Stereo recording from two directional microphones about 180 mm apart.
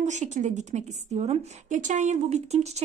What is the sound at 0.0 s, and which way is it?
A woman's voice, 40° right (ahead or behind).